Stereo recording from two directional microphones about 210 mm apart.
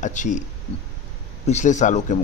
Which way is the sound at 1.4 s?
35° left (ahead or behind).